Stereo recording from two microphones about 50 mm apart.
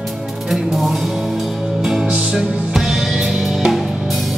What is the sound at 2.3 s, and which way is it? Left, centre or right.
Music, centre.